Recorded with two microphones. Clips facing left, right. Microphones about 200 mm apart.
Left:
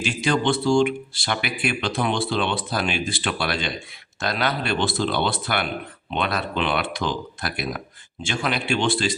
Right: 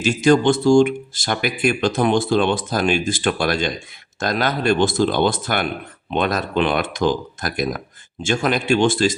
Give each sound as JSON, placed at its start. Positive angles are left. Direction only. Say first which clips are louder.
{"t": 0.0, "sound": "speech", "louder": "right 7 dB", "side_deg": -45}